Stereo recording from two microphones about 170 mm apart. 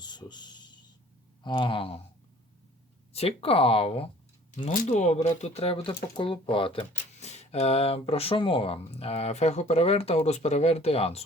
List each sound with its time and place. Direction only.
0.0 s a sound: 25° left (ahead or behind)
1.5 s speech: 30° left (ahead or behind)
3.1 s speech: 35° left (ahead or behind)
4.5 s speech: 50° left (ahead or behind)